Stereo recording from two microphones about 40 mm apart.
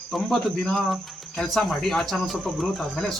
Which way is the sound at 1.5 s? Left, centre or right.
Centre.